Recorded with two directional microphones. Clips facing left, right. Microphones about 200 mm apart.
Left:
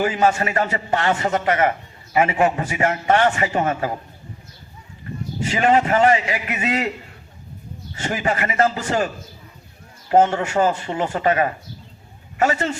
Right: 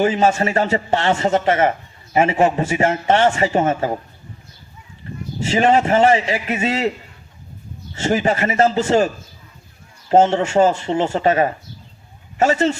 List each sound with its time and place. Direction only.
0.0 s a man's voice: 25° right (ahead or behind)
5.4 s a man's voice: 25° right (ahead or behind)
7.9 s a man's voice: 25° right (ahead or behind)
10.1 s a man's voice: 25° right (ahead or behind)